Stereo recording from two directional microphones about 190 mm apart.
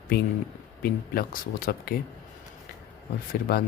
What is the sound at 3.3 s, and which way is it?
Speech, 50° left (ahead or behind).